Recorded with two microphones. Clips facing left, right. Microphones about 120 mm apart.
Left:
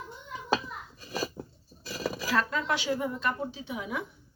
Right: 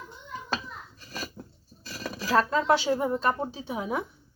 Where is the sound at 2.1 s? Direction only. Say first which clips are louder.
Right 6 dB; 35° right (ahead or behind).